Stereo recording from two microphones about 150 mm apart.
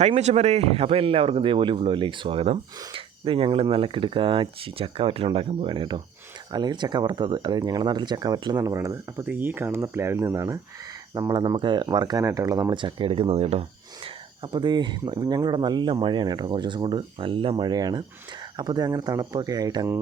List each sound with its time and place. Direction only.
0.0 s speech: 50° right (ahead or behind); by 20.0 s 25° right (ahead or behind)